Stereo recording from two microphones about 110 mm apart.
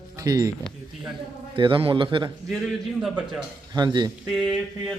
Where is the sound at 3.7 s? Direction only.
40° right (ahead or behind).